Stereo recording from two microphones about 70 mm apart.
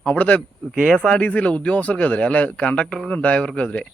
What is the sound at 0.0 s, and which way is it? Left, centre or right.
Speech, centre.